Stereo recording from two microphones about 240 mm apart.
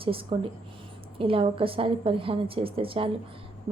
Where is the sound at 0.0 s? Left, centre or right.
Right.